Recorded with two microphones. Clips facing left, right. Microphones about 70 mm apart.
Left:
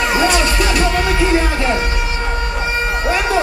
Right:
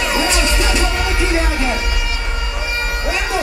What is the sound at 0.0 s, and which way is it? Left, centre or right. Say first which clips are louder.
Music: left 3 dB; left.